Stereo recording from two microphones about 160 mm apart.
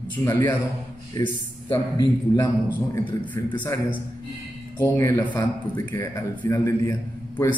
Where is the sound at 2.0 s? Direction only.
25° left (ahead or behind).